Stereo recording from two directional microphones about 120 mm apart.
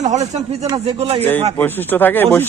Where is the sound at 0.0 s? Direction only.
75° right (ahead or behind).